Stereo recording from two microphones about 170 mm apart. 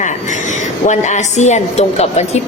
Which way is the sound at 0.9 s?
45° left (ahead or behind).